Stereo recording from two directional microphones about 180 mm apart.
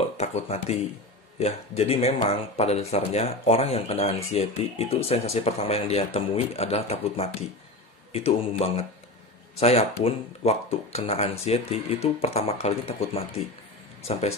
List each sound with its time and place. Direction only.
0.2 s speech: 35° left (ahead or behind)